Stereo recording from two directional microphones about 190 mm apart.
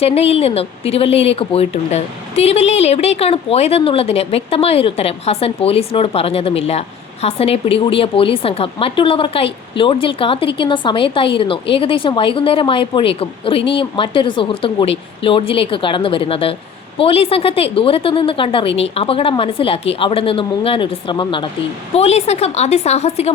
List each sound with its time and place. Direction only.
0.0 s a woman's voice: 30° left (ahead or behind)